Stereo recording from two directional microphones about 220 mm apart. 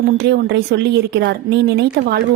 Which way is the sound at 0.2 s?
50° right (ahead or behind).